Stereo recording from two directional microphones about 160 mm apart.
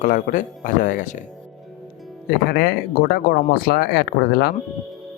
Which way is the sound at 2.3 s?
75° left (ahead or behind).